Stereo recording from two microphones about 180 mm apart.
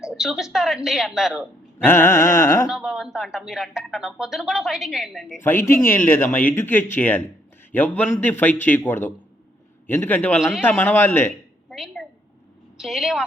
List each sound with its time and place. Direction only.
0.0 s speech: centre (ahead or behind)
1.8 s speech: 10° left (ahead or behind)
2.6 s speech: 5° right (ahead or behind)
5.4 s speech: 10° left (ahead or behind)
11.7 s a sound: centre (ahead or behind)
12.7 s a woman's voice: centre (ahead or behind)